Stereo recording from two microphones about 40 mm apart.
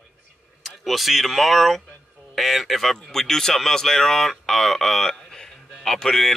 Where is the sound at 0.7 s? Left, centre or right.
Centre.